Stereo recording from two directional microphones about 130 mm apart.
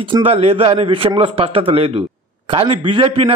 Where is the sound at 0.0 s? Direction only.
45° right (ahead or behind).